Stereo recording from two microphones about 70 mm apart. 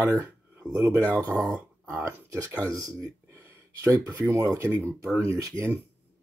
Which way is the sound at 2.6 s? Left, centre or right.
Right.